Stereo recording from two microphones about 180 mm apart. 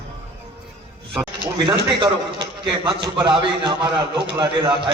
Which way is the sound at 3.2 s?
25° right (ahead or behind).